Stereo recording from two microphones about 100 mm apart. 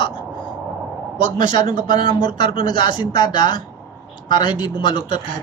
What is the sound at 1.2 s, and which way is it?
Speech, 50° left (ahead or behind).